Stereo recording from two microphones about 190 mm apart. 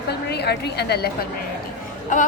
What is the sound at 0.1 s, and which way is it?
A woman's voice, 60° left (ahead or behind).